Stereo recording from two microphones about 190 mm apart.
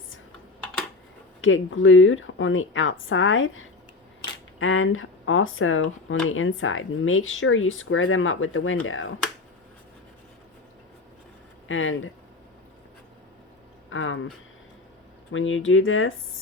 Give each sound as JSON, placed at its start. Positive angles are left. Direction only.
{"t": 1.4, "sound": "speech", "side_deg": 90}
{"t": 11.7, "sound": "speech", "side_deg": 90}
{"t": 13.9, "sound": "speech", "side_deg": 90}
{"t": 15.3, "sound": "speech", "side_deg": 90}